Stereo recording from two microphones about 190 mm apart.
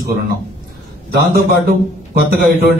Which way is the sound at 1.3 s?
55° right (ahead or behind).